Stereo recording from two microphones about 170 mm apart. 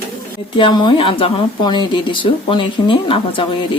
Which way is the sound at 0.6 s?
25° left (ahead or behind).